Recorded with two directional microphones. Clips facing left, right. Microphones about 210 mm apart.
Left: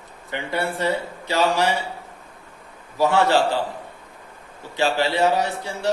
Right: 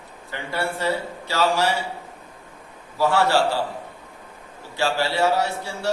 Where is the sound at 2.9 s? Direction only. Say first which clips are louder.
Left 2 dB; 20° left (ahead or behind).